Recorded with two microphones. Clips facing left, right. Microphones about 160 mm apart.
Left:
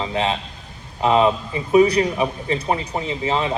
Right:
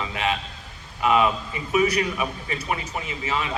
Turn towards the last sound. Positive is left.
turn(degrees=30)  # may be behind; listen again after turning